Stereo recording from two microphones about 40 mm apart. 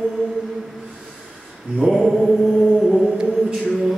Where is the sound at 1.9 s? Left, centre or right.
Centre.